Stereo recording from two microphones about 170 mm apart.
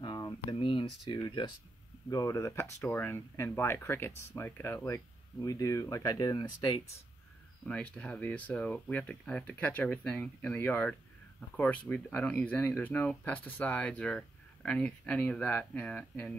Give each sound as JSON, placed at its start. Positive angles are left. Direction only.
{"t": 0.0, "sound": "a sound", "side_deg": 25}
{"t": 1.1, "sound": "speech", "side_deg": 25}
{"t": 7.6, "sound": "speech", "side_deg": 5}